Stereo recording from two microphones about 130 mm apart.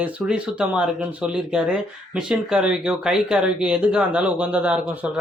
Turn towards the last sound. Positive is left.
turn(degrees=-10)  # may be behind; listen again after turning